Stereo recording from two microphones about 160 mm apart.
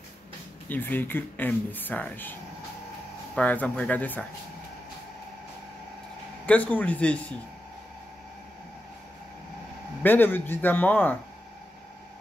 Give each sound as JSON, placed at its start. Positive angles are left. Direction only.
{"t": 0.7, "sound": "speech", "side_deg": 10}
{"t": 3.3, "sound": "speech", "side_deg": 10}
{"t": 6.4, "sound": "speech", "side_deg": 10}
{"t": 10.0, "sound": "speech", "side_deg": 10}